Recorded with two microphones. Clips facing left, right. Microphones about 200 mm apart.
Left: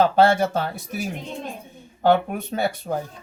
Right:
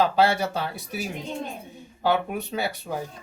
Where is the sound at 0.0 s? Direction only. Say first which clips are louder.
Left 4 dB; 50° left (ahead or behind).